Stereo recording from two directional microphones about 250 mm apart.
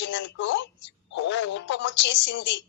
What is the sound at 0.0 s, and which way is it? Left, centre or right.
Speech, left.